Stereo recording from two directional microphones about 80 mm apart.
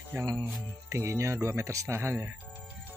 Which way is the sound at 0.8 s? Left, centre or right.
Right.